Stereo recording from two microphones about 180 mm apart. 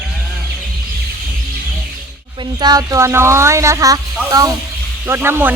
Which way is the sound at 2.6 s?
20° right (ahead or behind).